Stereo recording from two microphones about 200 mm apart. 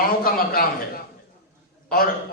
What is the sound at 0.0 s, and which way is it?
Speech, 45° left (ahead or behind).